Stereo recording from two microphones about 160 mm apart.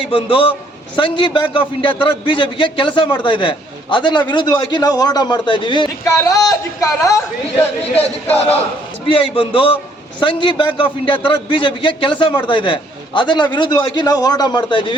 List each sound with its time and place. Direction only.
0.0 s a man's voice: 30° left (ahead or behind)
9.0 s a man's voice: 35° left (ahead or behind)